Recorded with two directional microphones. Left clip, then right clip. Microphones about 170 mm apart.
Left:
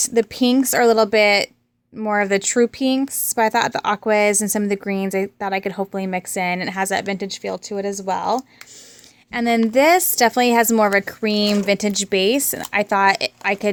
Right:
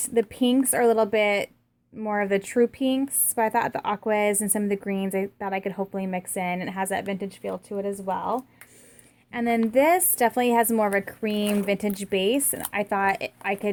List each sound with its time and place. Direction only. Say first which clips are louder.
0.0 s a woman's voice: left 5 dB; 30° left (ahead or behind)